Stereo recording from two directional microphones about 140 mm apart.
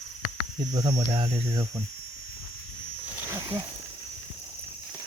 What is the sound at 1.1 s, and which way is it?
Speech, 45° right (ahead or behind).